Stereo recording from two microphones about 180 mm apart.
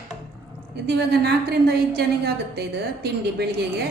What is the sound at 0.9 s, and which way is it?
A woman's voice, 65° right (ahead or behind).